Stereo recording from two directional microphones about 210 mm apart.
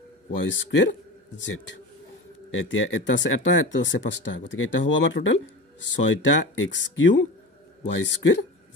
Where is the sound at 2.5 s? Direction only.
65° left (ahead or behind).